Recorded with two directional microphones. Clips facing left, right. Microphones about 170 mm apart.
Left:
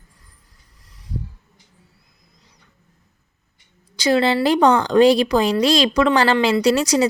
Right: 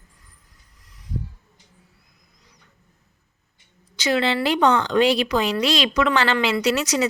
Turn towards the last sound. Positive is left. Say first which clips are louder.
# left 5 dB
turn(degrees=35)  # may be behind; listen again after turning